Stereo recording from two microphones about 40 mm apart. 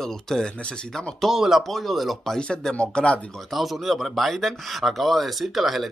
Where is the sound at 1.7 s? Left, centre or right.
Centre.